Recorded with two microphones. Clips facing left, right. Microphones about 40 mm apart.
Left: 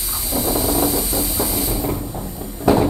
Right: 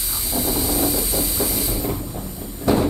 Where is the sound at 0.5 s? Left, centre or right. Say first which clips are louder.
Left 4 dB; centre.